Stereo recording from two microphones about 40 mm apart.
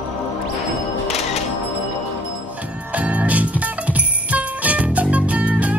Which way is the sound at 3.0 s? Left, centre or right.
Right.